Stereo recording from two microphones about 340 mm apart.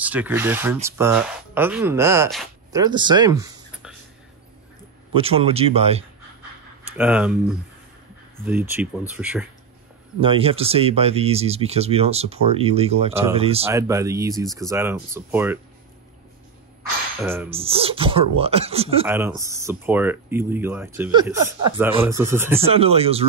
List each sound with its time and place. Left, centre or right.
0.0 s speech: centre
5.1 s speech: centre
7.0 s speech: centre
10.2 s speech: centre
17.2 s speech: centre
17.5 s speech: centre